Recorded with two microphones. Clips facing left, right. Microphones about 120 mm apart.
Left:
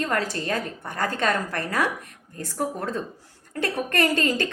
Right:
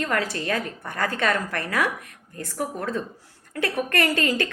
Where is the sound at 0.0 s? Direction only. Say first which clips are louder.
Even; 35° left (ahead or behind).